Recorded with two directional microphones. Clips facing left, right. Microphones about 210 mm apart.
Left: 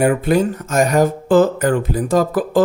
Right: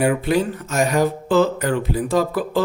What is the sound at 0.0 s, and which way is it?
Speech, 50° left (ahead or behind).